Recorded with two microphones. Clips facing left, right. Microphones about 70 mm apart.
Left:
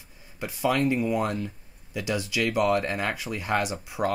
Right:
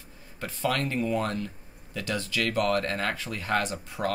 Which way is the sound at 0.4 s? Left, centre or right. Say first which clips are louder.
Left 4 dB; centre.